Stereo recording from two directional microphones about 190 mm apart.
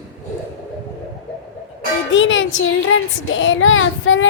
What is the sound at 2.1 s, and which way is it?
Speech, 80° left.